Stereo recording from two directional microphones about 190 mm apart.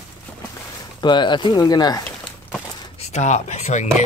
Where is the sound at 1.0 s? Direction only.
25° left (ahead or behind).